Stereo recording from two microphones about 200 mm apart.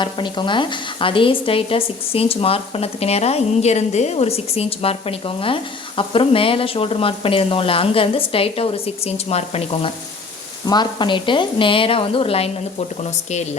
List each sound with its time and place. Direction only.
0.0 s speech: 25° left (ahead or behind)